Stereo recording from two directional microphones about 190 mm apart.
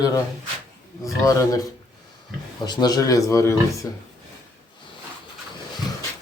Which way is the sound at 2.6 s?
20° left (ahead or behind).